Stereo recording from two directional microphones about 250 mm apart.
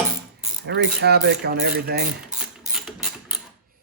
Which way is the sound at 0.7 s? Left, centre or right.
Right.